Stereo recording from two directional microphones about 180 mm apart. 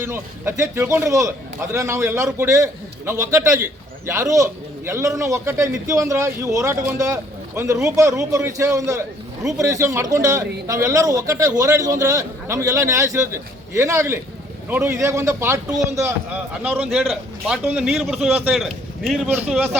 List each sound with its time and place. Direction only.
0.0 s speech: 15° right (ahead or behind)